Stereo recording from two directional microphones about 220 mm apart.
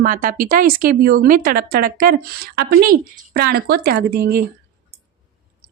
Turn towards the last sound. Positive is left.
turn(degrees=-45)  # may be behind; listen again after turning